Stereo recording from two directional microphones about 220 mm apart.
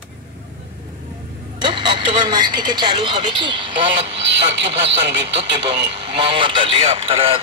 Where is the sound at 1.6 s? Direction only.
20° right (ahead or behind).